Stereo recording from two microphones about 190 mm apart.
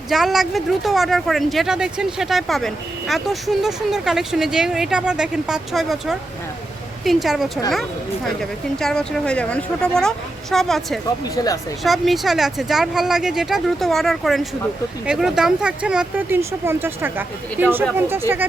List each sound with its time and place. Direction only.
0.1 s speech: centre (ahead or behind)
11.4 s speech: 20° left (ahead or behind)
11.8 s speech: centre (ahead or behind)